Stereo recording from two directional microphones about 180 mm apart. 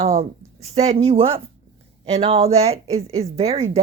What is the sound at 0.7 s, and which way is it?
A woman's voice, 35° right (ahead or behind).